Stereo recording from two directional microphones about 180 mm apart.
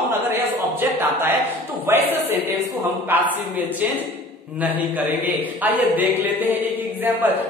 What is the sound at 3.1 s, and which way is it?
Speech, 10° right (ahead or behind).